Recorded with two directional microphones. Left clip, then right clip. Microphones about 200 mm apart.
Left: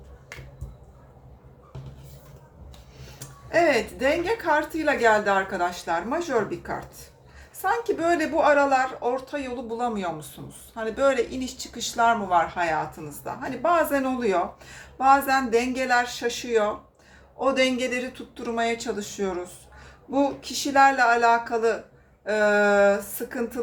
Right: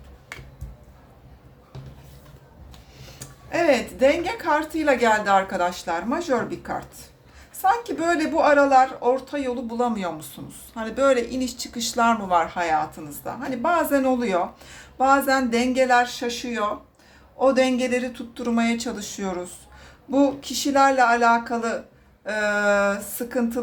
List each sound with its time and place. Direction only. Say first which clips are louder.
3.5 s a woman's voice: even; 25° right (ahead or behind)